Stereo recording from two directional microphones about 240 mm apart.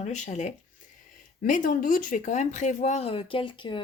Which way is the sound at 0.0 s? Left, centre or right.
Left.